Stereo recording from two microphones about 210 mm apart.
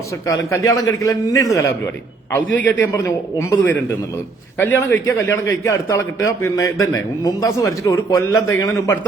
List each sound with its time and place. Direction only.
0.3 s a man's voice: 15° left (ahead or behind)
2.6 s a man's voice: 10° left (ahead or behind)